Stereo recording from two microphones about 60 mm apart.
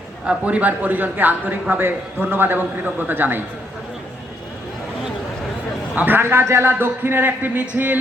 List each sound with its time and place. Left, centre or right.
0.3 s a man's voice: right
5.9 s a man's voice: right
6.1 s a man's voice: right